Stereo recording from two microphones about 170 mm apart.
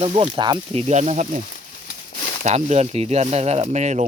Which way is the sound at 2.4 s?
45° right (ahead or behind).